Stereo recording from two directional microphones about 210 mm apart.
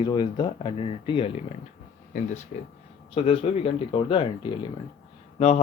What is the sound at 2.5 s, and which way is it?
Speech, 35° left (ahead or behind).